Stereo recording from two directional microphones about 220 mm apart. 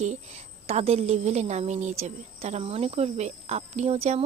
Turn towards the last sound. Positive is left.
turn(degrees=-30)  # may be behind; listen again after turning